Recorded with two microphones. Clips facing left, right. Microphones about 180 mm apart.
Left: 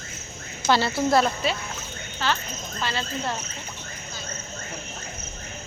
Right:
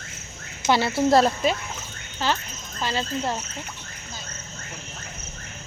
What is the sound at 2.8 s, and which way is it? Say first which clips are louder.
Speech: right 3 dB; 15° right (ahead or behind).